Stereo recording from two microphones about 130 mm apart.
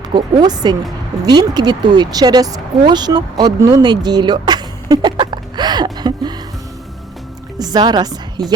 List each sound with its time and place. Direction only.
0.1 s speech: 35° right (ahead or behind)
7.6 s speech: 30° right (ahead or behind)